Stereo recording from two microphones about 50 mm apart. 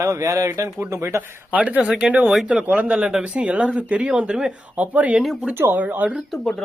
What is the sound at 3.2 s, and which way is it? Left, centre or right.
Speech, right.